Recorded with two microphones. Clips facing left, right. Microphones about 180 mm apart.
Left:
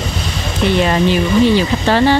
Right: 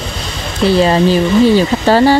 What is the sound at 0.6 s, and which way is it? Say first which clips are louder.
Speech: right 4 dB; 35° right (ahead or behind).